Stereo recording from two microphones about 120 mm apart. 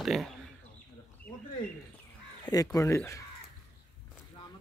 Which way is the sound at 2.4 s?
30° left (ahead or behind).